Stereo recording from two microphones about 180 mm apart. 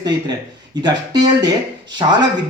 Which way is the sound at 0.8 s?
25° right (ahead or behind).